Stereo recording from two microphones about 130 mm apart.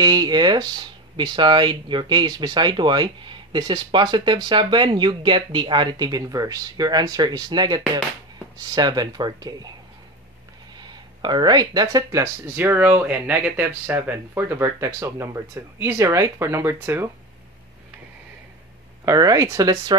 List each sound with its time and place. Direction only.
0.0 s speech: 30° right (ahead or behind)
10.8 s speech: 35° right (ahead or behind); by 17.1 s 20° right (ahead or behind)
19.0 s speech: 25° right (ahead or behind)